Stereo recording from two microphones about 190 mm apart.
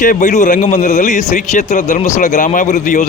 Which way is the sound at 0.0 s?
45° left (ahead or behind).